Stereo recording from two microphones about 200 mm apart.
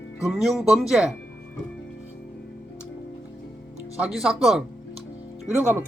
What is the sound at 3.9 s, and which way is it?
Speech, 5° right (ahead or behind).